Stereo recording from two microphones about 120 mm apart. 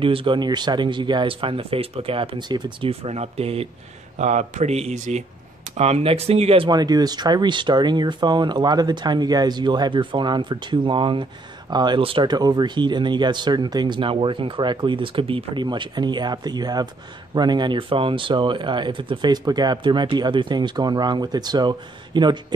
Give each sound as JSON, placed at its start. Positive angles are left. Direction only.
{"t": 0.0, "sound": "speech", "side_deg": -45}
{"t": 2.9, "sound": "speech", "side_deg": -60}
{"t": 4.2, "sound": "speech", "side_deg": -75}
{"t": 5.8, "sound": "speech", "side_deg": -60}
{"t": 6.7, "sound": "speech", "side_deg": -35}